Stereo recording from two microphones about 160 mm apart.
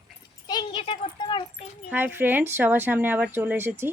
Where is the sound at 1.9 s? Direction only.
10° right (ahead or behind).